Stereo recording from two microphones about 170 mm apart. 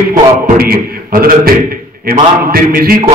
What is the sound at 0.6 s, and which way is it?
Speech, 60° right (ahead or behind).